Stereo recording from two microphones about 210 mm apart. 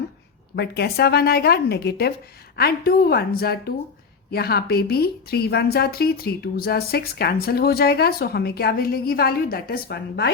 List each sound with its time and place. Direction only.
0.5 s a woman's voice: 50° left (ahead or behind)